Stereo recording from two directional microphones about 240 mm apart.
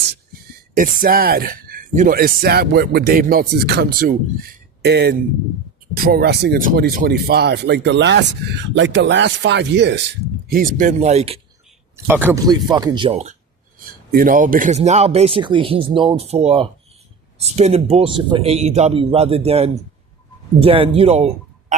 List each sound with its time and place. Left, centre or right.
0.8 s speech: right
10.5 s speech: right
11.9 s speech: centre; by 13.3 s right
14.1 s speech: right